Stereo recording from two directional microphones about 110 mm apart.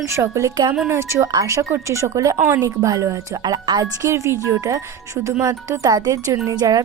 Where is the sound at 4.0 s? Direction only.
25° right (ahead or behind).